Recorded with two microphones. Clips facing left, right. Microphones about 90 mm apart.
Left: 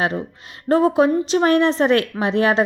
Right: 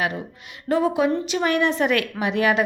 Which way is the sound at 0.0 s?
30° left (ahead or behind).